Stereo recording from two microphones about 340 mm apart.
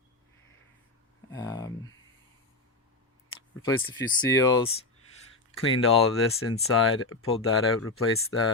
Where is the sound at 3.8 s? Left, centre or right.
Left.